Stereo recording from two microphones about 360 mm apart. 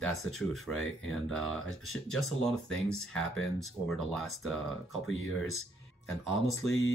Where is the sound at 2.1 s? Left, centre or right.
Centre.